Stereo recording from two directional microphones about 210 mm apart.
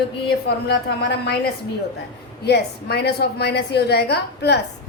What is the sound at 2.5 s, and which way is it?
A woman's voice, 50° left (ahead or behind).